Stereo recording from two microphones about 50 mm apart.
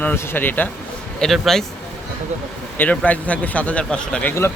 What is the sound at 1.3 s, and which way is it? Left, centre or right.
Speech, centre.